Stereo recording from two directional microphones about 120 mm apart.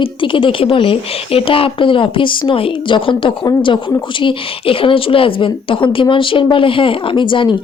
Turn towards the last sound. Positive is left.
turn(degrees=45)  # may be behind; listen again after turning